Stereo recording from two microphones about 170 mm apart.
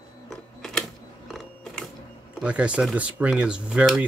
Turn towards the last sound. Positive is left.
turn(degrees=-5)  # may be behind; listen again after turning